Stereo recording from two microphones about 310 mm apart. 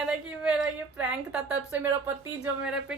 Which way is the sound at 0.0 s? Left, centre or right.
Centre.